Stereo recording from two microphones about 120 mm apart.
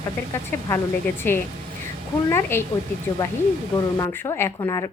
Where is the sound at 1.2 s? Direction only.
20° left (ahead or behind).